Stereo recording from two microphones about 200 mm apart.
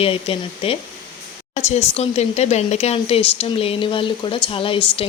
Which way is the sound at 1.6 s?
35° left (ahead or behind).